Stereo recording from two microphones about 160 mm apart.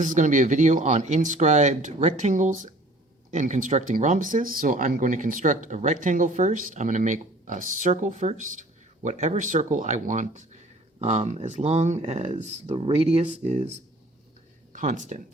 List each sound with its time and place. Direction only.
0.0 s speech: 55° right (ahead or behind)